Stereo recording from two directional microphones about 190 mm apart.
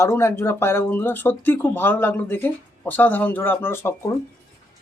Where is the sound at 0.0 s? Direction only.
15° left (ahead or behind).